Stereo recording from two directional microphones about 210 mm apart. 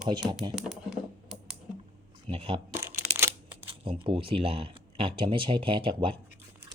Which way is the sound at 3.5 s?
25° right (ahead or behind).